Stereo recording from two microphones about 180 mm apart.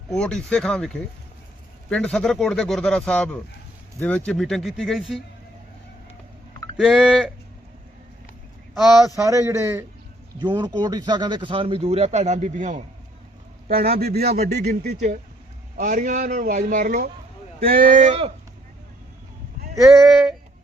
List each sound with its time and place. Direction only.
0.1 s speech: 5° left (ahead or behind)
6.7 s speech: 5° right (ahead or behind)
8.7 s speech: centre (ahead or behind)
9.1 s speech: 20° right (ahead or behind); by 12.8 s 40° right (ahead or behind)
13.7 s a man's voice: 55° right (ahead or behind)
15.8 s a man's voice: 45° right (ahead or behind)
19.9 s speech: centre (ahead or behind)